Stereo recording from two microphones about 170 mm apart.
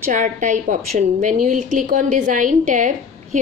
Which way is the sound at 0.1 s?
50° right (ahead or behind).